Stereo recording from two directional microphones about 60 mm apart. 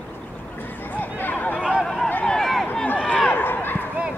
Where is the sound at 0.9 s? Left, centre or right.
Left.